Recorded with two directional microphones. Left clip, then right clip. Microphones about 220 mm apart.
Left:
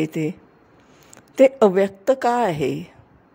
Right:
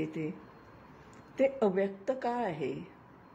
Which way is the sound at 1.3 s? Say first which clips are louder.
Left 14 dB; 50° left (ahead or behind).